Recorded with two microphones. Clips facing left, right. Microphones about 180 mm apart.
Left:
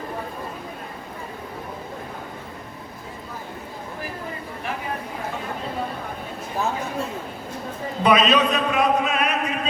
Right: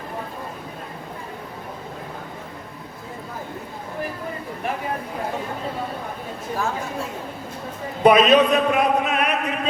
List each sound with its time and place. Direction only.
8.0 s a man's voice: 55° right (ahead or behind)